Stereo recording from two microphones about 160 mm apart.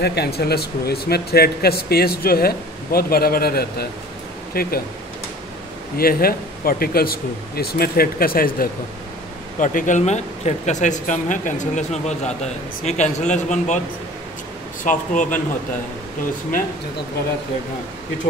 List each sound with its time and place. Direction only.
0.0 s speech: 90° left; by 4.8 s 70° left (ahead or behind)
5.9 s speech: 70° left (ahead or behind)
9.6 s speech: 55° left (ahead or behind)
14.9 s speech: 55° left (ahead or behind)